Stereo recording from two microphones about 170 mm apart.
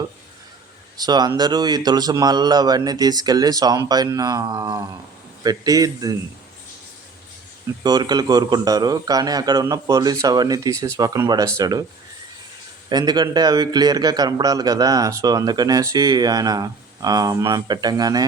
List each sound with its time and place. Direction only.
0.9 s a man's voice: 25° right (ahead or behind)
7.9 s a man's voice: 25° right (ahead or behind)
12.9 s a man's voice: 25° right (ahead or behind)